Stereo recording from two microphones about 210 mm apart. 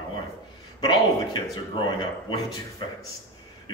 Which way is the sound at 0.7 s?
20° left (ahead or behind).